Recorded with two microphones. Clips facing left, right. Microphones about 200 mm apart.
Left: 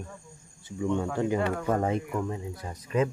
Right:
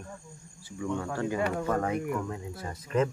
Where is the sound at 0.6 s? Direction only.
20° left (ahead or behind).